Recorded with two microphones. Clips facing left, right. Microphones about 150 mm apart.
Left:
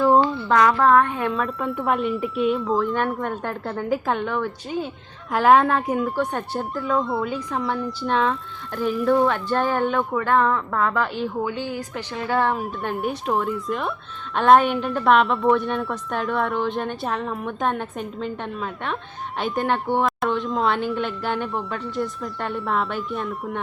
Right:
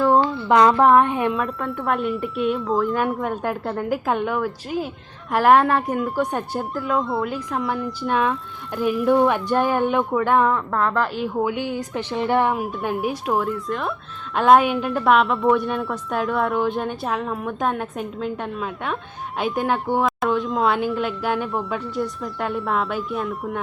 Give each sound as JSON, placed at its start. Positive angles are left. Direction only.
{"t": 0.0, "sound": "a sound", "side_deg": 0}
{"t": 0.4, "sound": "a woman's voice", "side_deg": -20}
{"t": 1.3, "sound": "a woman's voice", "side_deg": 0}
{"t": 11.4, "sound": "a woman's voice", "side_deg": -15}
{"t": 12.5, "sound": "a woman's voice", "side_deg": 0}